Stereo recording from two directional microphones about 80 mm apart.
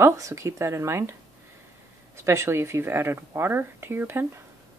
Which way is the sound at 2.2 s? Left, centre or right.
Right.